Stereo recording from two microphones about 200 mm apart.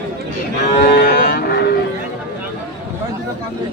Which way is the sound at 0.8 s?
45° left (ahead or behind).